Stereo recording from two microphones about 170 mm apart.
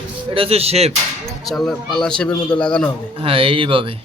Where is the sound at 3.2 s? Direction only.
35° right (ahead or behind).